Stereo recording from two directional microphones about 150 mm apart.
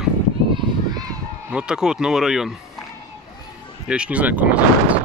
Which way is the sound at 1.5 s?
5° right (ahead or behind).